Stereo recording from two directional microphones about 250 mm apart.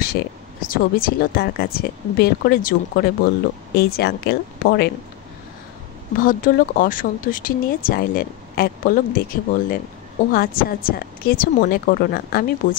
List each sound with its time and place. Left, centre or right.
0.0 s speech: left
6.2 s speech: left